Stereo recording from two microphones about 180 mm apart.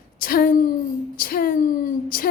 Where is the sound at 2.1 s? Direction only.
55° left (ahead or behind).